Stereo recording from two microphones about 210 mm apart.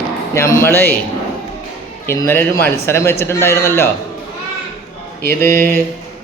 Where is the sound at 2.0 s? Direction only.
15° left (ahead or behind).